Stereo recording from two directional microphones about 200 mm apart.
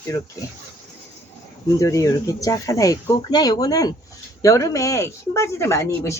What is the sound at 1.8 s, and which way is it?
Speech, 15° left (ahead or behind).